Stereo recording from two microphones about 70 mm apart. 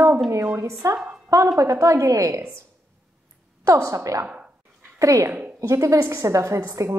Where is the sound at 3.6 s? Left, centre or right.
Right.